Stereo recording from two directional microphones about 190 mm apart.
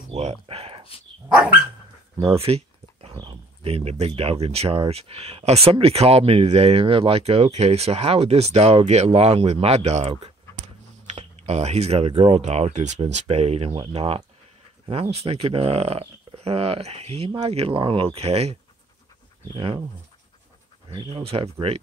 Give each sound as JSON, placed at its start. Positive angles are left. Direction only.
{"t": 0.1, "sound": "a sound", "side_deg": -35}
{"t": 2.1, "sound": "speech", "side_deg": -30}
{"t": 20.9, "sound": "speech", "side_deg": -25}